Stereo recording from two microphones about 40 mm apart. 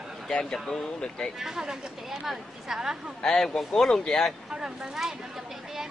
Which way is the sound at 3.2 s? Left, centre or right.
Centre.